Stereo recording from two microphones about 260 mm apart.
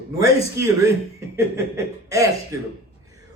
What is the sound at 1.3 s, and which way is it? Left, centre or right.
A man's voice, centre.